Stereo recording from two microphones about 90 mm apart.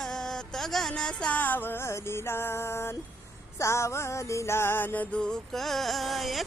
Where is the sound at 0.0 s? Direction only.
5° left (ahead or behind); by 5.0 s 25° left (ahead or behind).